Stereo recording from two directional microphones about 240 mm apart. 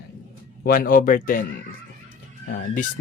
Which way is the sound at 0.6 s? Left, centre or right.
Left.